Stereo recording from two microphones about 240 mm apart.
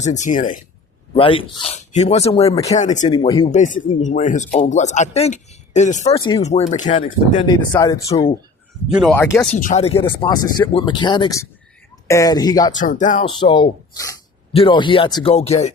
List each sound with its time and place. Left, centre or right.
0.0 s speech: left
1.1 s speech: left
3.1 s speech: centre
7.4 s speech: centre
8.9 s speech: centre
9.1 s speech: centre
9.5 s speech: left
12.8 s speech: left
13.4 s speech: centre